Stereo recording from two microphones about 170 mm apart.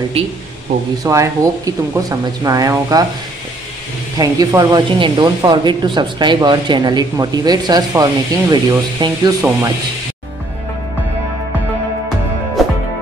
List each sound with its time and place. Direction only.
1.0 s speech: 20° right (ahead or behind)
4.2 s speech: 20° right (ahead or behind)